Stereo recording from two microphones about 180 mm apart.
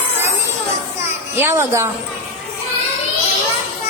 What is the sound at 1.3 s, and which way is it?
Speech, 15° right (ahead or behind).